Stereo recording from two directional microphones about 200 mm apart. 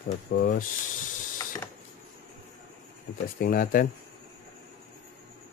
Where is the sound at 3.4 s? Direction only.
45° left (ahead or behind).